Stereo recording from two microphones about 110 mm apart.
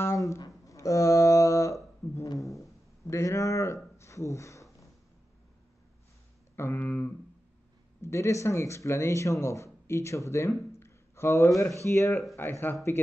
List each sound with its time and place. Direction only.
0.0 s a sound: 25° left (ahead or behind)
3.1 s speech: 25° left (ahead or behind)
6.5 s speech: 20° left (ahead or behind)